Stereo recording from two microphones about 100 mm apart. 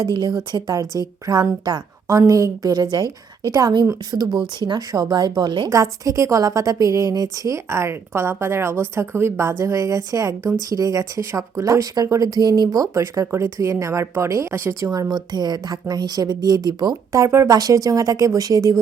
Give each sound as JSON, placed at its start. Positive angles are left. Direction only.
{"t": 0.0, "sound": "a woman's voice", "side_deg": -50}
{"t": 0.5, "sound": "a woman's voice", "side_deg": -40}
{"t": 2.0, "sound": "a woman's voice", "side_deg": -35}
{"t": 4.1, "sound": "speech", "side_deg": -25}
{"t": 4.6, "sound": "a woman's voice", "side_deg": -45}
{"t": 5.6, "sound": "a woman's voice", "side_deg": -30}
{"t": 17.1, "sound": "a woman's voice", "side_deg": -30}